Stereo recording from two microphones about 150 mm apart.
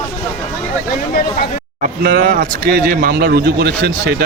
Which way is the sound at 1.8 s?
75° right (ahead or behind).